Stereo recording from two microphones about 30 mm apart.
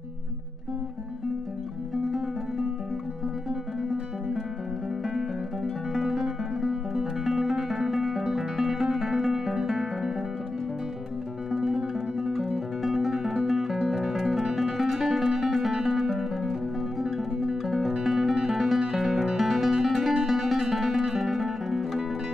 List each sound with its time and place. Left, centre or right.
5.9 s music: centre
11.5 s music: centre